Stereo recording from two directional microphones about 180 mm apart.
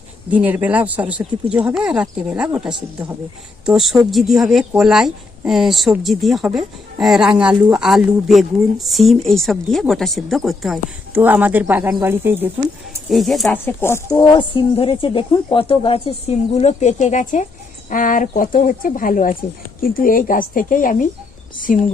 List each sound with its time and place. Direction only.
0.3 s speech: 10° right (ahead or behind)
13.1 s speech: centre (ahead or behind)
13.7 s speech: 15° left (ahead or behind); by 21.8 s 50° left (ahead or behind)